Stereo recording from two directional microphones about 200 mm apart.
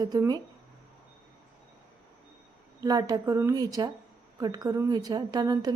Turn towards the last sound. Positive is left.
turn(degrees=-20)  # may be behind; listen again after turning